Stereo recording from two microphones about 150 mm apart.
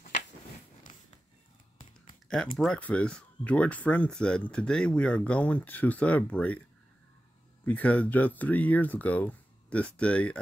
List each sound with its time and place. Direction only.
2.2 s speech: 10° left (ahead or behind)
7.6 s speech: 10° left (ahead or behind)